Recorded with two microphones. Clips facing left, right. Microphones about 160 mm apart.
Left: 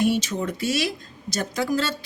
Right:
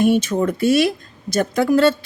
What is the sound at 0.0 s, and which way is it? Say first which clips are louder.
A woman's voice: right 6 dB; 50° right (ahead or behind).